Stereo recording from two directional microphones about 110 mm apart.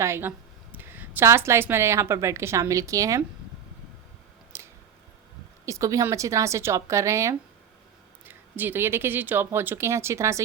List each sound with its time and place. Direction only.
0.0 s a woman's voice: 20° right (ahead or behind)
4.5 s a sound: 25° right (ahead or behind)
5.6 s a woman's voice: 30° right (ahead or behind)
8.2 s a woman's voice: 15° right (ahead or behind)